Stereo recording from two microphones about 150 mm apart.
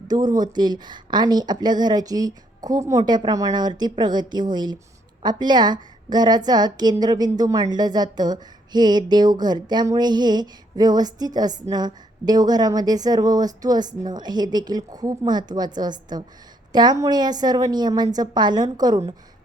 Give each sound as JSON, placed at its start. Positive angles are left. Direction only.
{"t": 0.3, "sound": "a woman's voice", "side_deg": -30}